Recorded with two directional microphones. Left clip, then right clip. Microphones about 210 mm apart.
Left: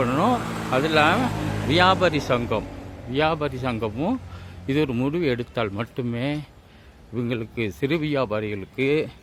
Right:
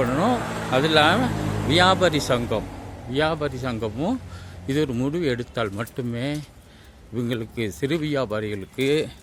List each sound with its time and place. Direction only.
0.0 s speech: centre (ahead or behind)
0.3 s vehicle: 50° left (ahead or behind)
0.7 s speech: 5° right (ahead or behind)